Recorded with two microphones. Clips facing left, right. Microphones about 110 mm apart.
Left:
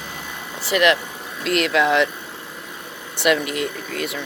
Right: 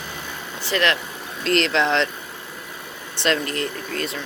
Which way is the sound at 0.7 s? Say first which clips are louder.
Left 4 dB; 15° left (ahead or behind).